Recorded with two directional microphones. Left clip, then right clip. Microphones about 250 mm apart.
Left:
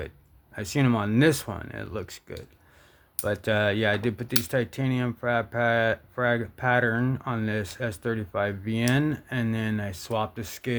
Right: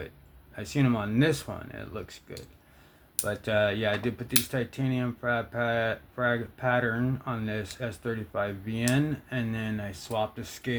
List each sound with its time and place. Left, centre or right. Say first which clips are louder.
0.5 s speech: left 3 dB; left